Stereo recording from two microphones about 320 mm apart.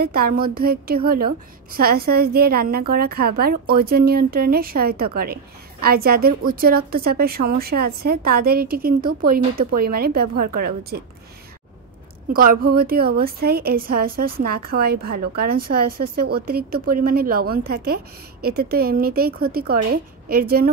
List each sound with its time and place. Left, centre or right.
0.0 s a woman's voice: right
12.3 s a woman's voice: right